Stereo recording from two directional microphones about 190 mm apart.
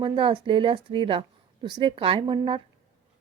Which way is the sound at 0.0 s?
25° right (ahead or behind).